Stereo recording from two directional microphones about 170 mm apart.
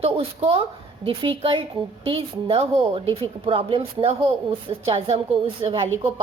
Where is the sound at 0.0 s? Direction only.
35° right (ahead or behind).